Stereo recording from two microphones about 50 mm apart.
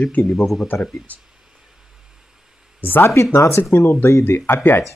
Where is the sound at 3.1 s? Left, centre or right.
Left.